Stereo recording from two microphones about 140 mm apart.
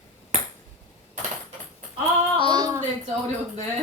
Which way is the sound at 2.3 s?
35° right (ahead or behind).